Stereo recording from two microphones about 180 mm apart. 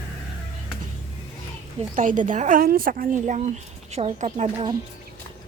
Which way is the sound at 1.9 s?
45° right (ahead or behind).